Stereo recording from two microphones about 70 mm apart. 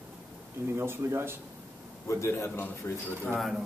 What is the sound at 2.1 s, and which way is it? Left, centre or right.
Speech, left.